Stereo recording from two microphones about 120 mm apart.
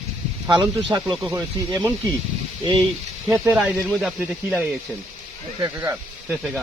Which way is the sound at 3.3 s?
25° right (ahead or behind).